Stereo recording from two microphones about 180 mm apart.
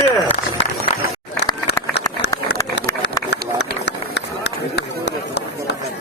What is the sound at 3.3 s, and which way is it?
Run, 70° left (ahead or behind).